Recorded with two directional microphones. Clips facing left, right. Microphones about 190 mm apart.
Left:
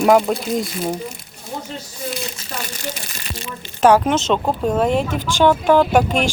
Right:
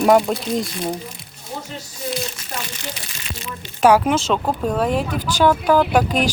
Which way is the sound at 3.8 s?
10° right (ahead or behind).